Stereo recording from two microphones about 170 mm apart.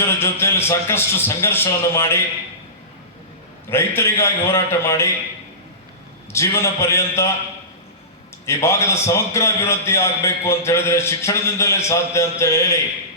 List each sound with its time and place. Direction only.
0.0 s a man's voice: 15° left (ahead or behind)
3.7 s a man's voice: 15° left (ahead or behind)
6.3 s a man's voice: 15° left (ahead or behind)
8.4 s a man's voice: 15° left (ahead or behind)